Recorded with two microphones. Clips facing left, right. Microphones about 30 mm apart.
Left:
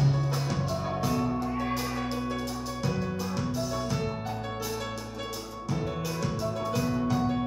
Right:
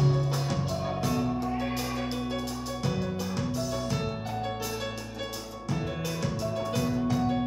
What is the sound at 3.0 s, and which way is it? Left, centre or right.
Music, centre.